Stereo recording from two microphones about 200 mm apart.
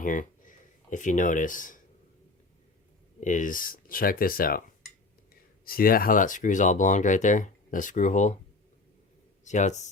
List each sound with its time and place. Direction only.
0.0 s a sound: 40° left (ahead or behind)
3.2 s speech: 40° left (ahead or behind)
5.6 s speech: 45° left (ahead or behind)
9.4 s speech: 35° left (ahead or behind)